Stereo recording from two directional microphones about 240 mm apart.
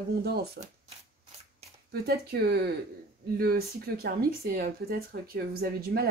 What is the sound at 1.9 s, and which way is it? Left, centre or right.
Speech, right.